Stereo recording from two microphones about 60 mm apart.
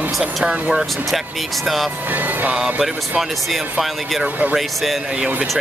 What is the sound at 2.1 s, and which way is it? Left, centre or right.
Music, right.